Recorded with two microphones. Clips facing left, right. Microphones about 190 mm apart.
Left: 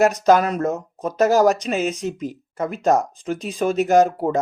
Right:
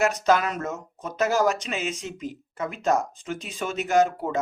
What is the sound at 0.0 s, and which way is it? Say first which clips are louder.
Speech: left 6 dB; 40° left (ahead or behind).